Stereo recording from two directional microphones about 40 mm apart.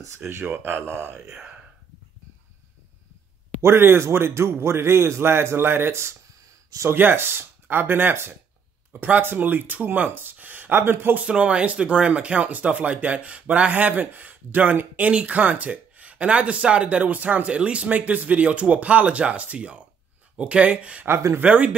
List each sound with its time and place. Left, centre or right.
0.4 s speech: right
3.6 s a man's voice: right
6.8 s speech: right
8.9 s speech: right
9.2 s speech: right
10.4 s a sound: right
10.7 s speech: right
11.1 s a man's voice: right
17.8 s speech: right